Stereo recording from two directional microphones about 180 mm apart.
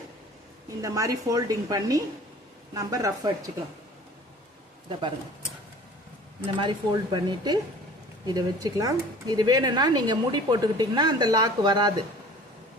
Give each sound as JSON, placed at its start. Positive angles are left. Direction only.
{"t": 0.8, "sound": "speech", "side_deg": -20}
{"t": 4.9, "sound": "speech", "side_deg": -25}
{"t": 6.4, "sound": "speech", "side_deg": -25}